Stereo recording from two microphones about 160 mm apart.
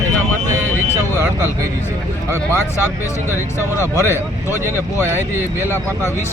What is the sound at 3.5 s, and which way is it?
Speech, 20° left (ahead or behind).